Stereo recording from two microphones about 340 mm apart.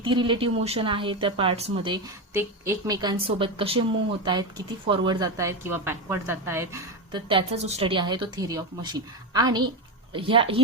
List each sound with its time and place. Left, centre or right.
0.0 s speech: centre